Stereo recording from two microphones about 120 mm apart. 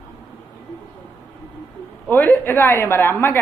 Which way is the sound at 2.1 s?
15° left (ahead or behind).